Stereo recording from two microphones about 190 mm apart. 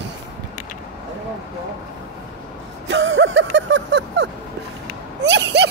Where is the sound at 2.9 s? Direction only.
75° right (ahead or behind).